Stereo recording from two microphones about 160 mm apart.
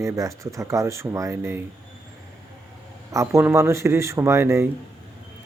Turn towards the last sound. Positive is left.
turn(degrees=-15)  # may be behind; listen again after turning